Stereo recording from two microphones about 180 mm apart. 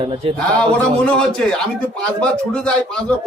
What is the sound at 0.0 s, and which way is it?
Speech, 30° right (ahead or behind).